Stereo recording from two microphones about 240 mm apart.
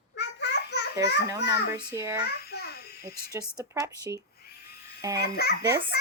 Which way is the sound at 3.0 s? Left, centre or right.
Centre.